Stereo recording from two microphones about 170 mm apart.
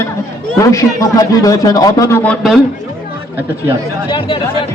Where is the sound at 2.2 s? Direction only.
5° left (ahead or behind).